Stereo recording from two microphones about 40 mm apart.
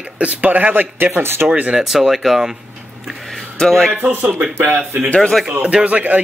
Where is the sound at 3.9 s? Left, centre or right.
Right.